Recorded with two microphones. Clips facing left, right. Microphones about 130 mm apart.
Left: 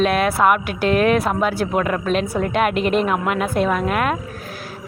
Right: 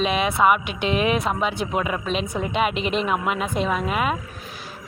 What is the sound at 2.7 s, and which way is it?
Speech, 50° left (ahead or behind).